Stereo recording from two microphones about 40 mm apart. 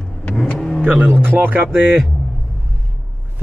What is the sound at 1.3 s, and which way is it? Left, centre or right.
Music, right.